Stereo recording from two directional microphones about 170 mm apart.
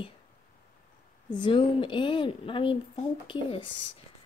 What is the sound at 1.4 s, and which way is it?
Speech, 30° left (ahead or behind).